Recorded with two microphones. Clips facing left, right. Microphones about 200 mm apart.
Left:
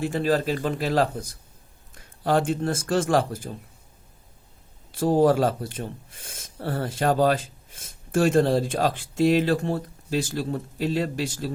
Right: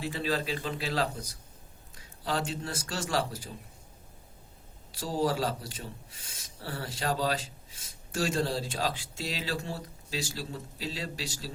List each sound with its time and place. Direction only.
0.0 s speech: 50° left (ahead or behind)
4.9 s speech: 55° left (ahead or behind)